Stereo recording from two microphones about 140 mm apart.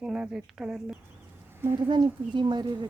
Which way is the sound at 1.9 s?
35° right (ahead or behind).